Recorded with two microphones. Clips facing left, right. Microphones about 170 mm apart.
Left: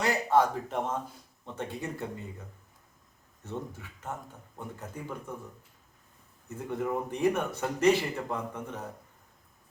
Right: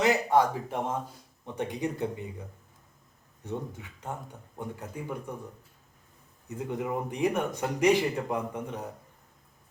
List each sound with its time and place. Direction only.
0.0 s speech: 15° right (ahead or behind)
3.4 s speech: 15° right (ahead or behind)
6.5 s speech: 15° right (ahead or behind)